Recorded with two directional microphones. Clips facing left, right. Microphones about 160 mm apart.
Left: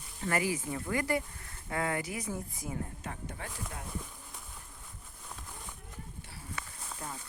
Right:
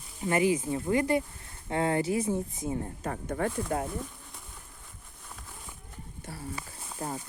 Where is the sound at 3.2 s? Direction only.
70° right (ahead or behind).